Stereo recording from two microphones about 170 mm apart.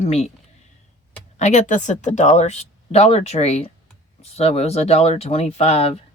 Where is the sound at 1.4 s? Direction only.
40° left (ahead or behind).